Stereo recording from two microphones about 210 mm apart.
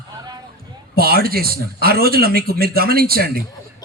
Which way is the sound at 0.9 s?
45° right (ahead or behind).